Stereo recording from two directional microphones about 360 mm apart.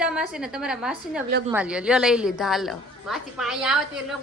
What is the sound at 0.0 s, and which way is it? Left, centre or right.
A woman's voice, centre.